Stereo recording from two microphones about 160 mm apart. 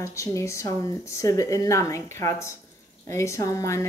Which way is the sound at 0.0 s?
20° left (ahead or behind).